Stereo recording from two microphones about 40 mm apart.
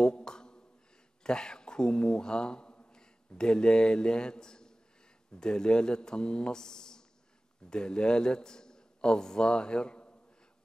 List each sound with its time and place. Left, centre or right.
0.0 s a sound: centre
1.2 s speech: centre
2.9 s a man's voice: centre